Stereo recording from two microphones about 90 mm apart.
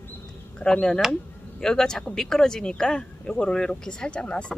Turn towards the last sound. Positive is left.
turn(degrees=10)  # may be behind; listen again after turning